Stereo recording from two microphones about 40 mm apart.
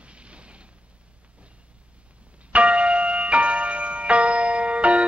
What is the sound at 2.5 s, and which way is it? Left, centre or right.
Music, right.